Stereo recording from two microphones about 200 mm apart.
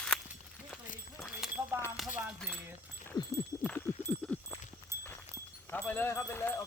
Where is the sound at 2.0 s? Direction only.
Centre (ahead or behind).